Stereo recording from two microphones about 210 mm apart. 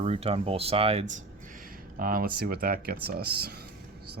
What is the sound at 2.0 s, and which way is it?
Speech, 45° right (ahead or behind).